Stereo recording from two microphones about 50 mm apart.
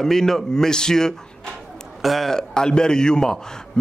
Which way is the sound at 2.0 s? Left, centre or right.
Centre.